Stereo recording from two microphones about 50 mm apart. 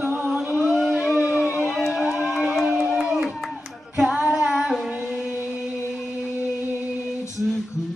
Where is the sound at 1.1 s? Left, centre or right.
Centre.